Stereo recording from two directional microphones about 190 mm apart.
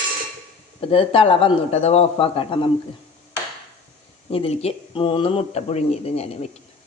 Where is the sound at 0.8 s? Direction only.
30° left (ahead or behind).